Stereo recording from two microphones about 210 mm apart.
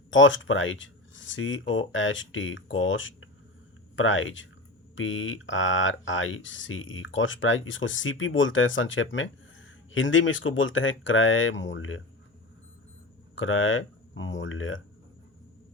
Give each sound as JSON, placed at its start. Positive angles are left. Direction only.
{"t": 0.1, "sound": "speech", "side_deg": 65}
{"t": 13.3, "sound": "speech", "side_deg": 70}